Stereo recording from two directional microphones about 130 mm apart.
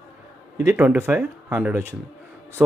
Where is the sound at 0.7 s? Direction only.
15° right (ahead or behind).